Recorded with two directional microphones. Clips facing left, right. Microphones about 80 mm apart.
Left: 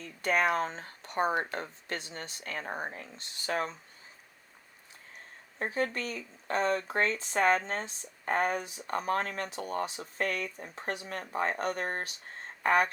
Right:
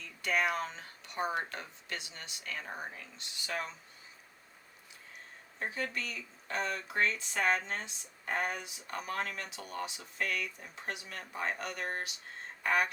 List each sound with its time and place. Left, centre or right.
0.0 s speech: left
5.5 s speech: left